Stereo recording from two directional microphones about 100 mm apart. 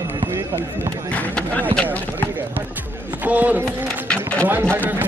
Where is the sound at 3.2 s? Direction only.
15° right (ahead or behind).